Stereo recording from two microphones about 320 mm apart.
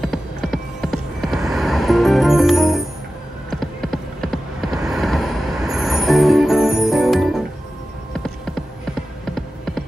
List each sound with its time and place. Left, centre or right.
0.0 s music: centre
3.4 s a sound: centre
9.2 s music: centre